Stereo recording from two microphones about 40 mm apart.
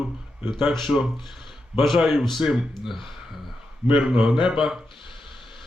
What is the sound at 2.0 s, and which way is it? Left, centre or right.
Speech, centre.